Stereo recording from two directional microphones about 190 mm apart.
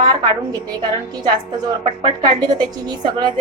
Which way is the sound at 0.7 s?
20° right (ahead or behind).